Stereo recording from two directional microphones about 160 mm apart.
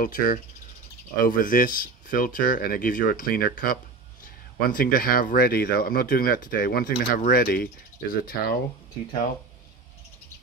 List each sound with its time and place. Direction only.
0.0 s speech: 60° left (ahead or behind)